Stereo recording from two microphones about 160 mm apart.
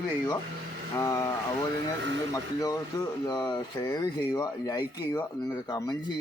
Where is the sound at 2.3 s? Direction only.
20° left (ahead or behind).